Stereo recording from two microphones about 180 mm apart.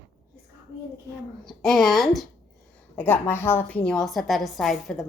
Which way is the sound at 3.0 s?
10° left (ahead or behind).